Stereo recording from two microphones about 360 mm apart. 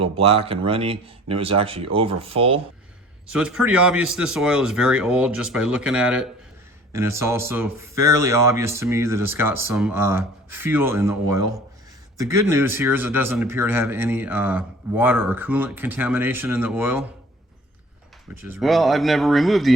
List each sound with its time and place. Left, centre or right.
0.0 s speech: centre
3.3 s speech: centre
18.4 s speech: centre